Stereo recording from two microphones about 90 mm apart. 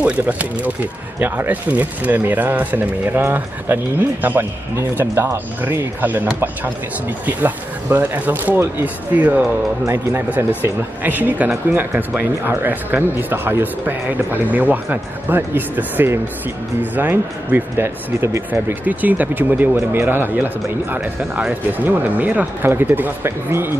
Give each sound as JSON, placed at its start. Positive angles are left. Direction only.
{"t": 0.0, "sound": "speech", "side_deg": -15}
{"t": 7.2, "sound": "speech", "side_deg": -20}
{"t": 10.6, "sound": "speech", "side_deg": -20}
{"t": 21.2, "sound": "speech", "side_deg": -5}
{"t": 21.7, "sound": "speech", "side_deg": -20}